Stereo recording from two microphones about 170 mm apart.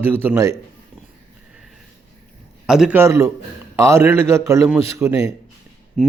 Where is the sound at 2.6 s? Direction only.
5° right (ahead or behind).